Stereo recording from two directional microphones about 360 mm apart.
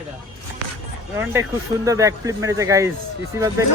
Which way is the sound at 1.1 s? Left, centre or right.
Centre.